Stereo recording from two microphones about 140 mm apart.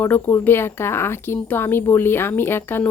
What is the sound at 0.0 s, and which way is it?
Speech, 15° left (ahead or behind).